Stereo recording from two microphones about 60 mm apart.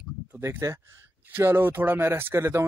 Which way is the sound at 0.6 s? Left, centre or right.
Right.